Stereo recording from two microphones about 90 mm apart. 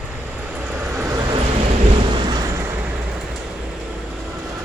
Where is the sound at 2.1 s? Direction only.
60° right (ahead or behind).